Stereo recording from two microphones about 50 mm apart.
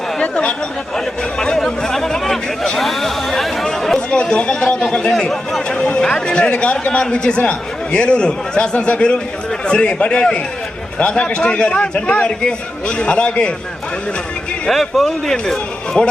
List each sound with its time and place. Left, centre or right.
0.2 s chatter: centre
0.9 s chatter: centre
4.2 s a man's voice: centre
5.6 s a man's voice: centre
14.7 s a man's voice: centre